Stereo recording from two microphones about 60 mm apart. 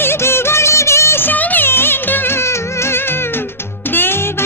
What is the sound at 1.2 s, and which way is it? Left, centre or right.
Music, left.